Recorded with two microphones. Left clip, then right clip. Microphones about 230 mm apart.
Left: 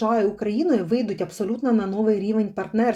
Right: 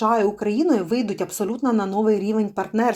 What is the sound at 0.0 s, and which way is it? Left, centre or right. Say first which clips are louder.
Speech: right 2 dB; centre.